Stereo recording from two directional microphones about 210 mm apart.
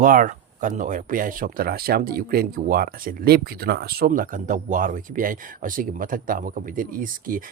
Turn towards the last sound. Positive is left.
turn(degrees=-40)  # may be behind; listen again after turning